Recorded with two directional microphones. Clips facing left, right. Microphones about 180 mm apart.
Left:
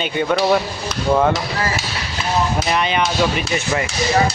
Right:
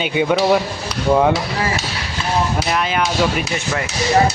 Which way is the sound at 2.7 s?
5° right (ahead or behind).